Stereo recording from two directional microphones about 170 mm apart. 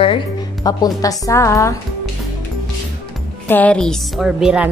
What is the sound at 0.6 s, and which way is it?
A woman's voice, 20° left (ahead or behind).